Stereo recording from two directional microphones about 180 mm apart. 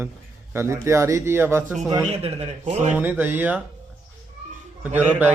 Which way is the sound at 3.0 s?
10° right (ahead or behind).